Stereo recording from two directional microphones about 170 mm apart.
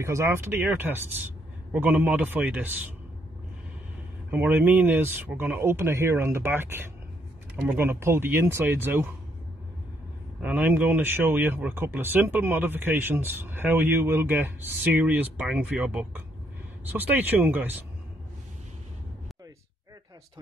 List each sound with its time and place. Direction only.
0.0 s speech: 15° right (ahead or behind)
4.3 s speech: 10° right (ahead or behind)
10.4 s speech: 10° right (ahead or behind)